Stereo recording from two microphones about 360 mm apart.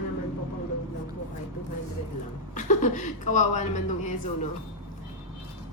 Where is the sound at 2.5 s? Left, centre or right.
Left.